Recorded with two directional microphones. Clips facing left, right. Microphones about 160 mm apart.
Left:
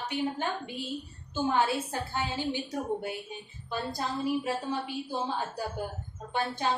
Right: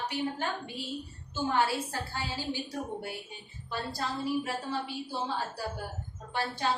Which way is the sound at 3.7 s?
20° left (ahead or behind).